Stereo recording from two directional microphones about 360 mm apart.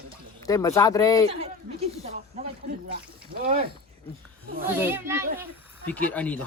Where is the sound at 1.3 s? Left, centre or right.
Centre.